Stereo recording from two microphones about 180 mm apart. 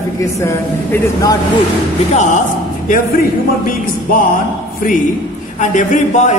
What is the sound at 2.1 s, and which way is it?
Speech, 45° left (ahead or behind).